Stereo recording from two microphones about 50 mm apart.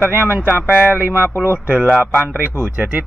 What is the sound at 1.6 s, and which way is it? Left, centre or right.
Speech, right.